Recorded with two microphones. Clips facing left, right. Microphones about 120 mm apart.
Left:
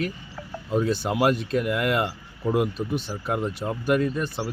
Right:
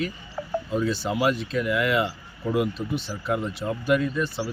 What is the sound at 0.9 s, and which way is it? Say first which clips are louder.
Speech: left 2 dB; 50° left (ahead or behind).